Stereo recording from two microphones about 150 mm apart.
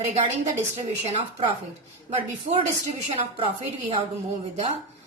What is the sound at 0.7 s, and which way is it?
A woman's voice, 40° right (ahead or behind).